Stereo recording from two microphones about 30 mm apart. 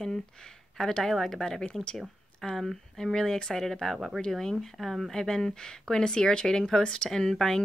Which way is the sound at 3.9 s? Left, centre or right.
Centre.